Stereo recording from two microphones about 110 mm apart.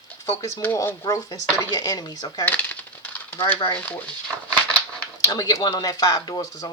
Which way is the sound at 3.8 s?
15° left (ahead or behind).